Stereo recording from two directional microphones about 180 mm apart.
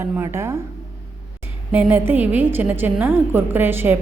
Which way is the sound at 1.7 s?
10° right (ahead or behind).